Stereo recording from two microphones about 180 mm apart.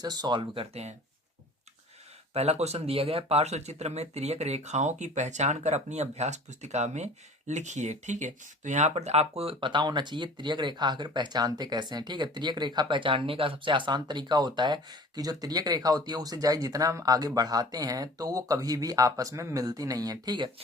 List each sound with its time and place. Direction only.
0.0 s speech: 20° right (ahead or behind)
2.3 s speech: 35° right (ahead or behind)